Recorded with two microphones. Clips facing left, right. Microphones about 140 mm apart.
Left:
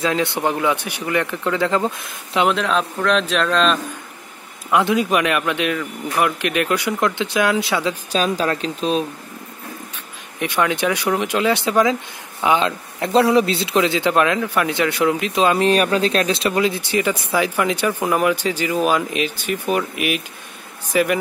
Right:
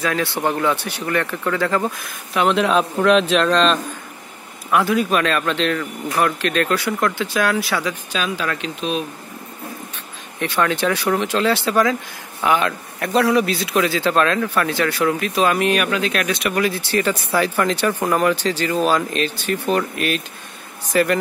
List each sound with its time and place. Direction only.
0.0 s speech: 20° left (ahead or behind)
2.5 s speech: 5° right (ahead or behind)
4.6 s speech: 20° left (ahead or behind)
8.1 s speech: 40° left (ahead or behind)
10.4 s speech: 15° left (ahead or behind)